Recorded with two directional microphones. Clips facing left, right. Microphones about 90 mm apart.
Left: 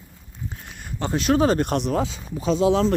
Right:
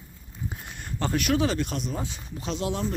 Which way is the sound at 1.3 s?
40° left (ahead or behind).